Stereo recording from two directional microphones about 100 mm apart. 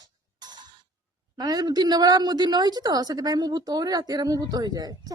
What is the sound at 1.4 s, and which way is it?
A woman's voice, 40° right (ahead or behind).